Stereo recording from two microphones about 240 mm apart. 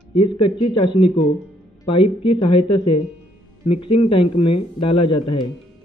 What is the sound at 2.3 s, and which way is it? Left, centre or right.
A man's voice, left.